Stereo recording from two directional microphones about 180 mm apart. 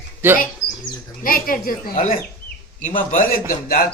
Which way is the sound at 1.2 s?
50° left (ahead or behind).